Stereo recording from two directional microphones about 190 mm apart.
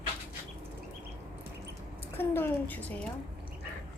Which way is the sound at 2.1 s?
10° left (ahead or behind).